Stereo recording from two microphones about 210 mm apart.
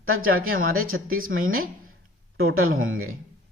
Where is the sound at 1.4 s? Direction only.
45° right (ahead or behind).